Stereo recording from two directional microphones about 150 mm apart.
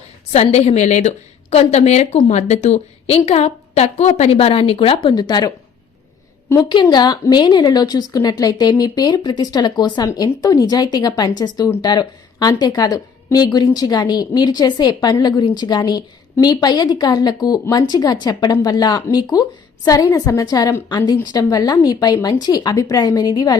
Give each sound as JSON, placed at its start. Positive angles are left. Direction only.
{"t": 0.3, "sound": "a woman's voice", "side_deg": 45}
{"t": 5.0, "sound": "a woman's voice", "side_deg": 30}
{"t": 6.5, "sound": "a woman's voice", "side_deg": 15}
{"t": 6.8, "sound": "a woman's voice", "side_deg": 25}